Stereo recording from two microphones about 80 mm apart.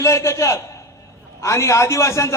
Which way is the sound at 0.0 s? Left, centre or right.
Left.